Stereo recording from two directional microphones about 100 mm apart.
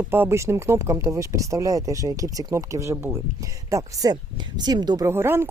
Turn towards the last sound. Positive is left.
turn(degrees=-25)  # may be behind; listen again after turning